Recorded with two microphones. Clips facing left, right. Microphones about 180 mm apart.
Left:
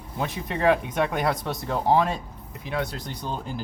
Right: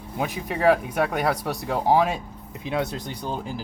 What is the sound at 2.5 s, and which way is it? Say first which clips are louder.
Speech: right 3 dB; 20° right (ahead or behind).